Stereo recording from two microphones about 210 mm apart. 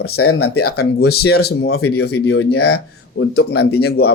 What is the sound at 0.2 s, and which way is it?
Speech, 90° left.